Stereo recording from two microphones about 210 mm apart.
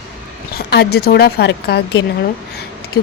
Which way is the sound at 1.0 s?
50° left (ahead or behind).